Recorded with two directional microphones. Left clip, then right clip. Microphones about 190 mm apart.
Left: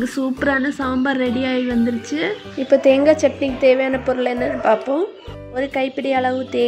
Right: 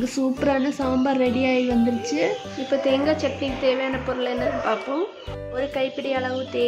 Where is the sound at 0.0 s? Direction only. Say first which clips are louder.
Left 3 dB; 15° left (ahead or behind).